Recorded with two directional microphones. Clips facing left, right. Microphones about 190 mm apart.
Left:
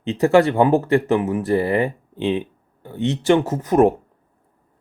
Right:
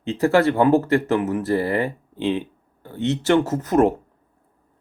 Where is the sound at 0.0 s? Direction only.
20° left (ahead or behind).